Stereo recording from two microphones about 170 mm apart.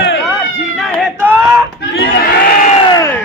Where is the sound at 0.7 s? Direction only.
Centre (ahead or behind).